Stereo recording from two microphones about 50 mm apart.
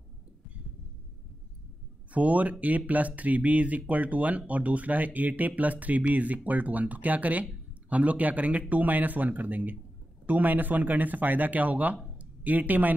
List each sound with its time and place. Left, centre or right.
2.1 s speech: right